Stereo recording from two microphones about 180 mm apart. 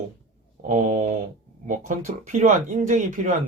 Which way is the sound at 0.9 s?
40° right (ahead or behind).